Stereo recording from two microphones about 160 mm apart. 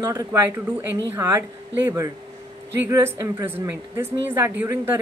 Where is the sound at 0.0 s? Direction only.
20° right (ahead or behind).